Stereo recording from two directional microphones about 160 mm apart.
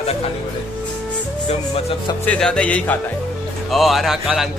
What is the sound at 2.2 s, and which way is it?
Speech, 5° left (ahead or behind).